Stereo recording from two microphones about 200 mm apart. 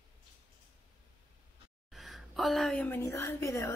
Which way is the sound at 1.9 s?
Centre (ahead or behind).